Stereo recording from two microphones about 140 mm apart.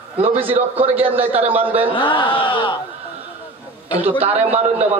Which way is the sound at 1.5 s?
15° right (ahead or behind).